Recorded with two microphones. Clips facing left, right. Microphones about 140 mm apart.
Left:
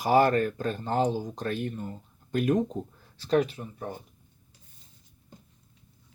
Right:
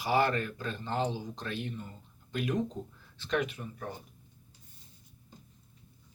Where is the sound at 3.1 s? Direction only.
35° left (ahead or behind).